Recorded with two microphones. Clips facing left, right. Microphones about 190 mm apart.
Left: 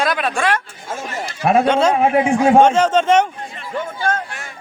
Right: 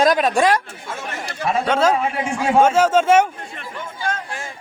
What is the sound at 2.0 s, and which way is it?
Speech, 55° left (ahead or behind).